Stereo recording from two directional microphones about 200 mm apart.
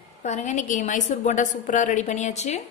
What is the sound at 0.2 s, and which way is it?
A woman's voice, 35° left (ahead or behind).